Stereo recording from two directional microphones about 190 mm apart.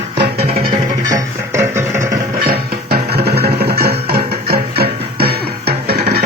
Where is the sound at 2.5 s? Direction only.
55° right (ahead or behind).